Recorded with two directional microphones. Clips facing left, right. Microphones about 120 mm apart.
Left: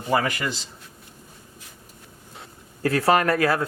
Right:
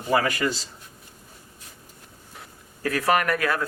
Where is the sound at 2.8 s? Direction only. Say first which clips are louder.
Left 3 dB; 30° left (ahead or behind).